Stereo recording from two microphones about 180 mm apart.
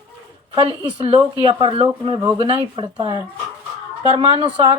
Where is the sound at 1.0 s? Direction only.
30° right (ahead or behind).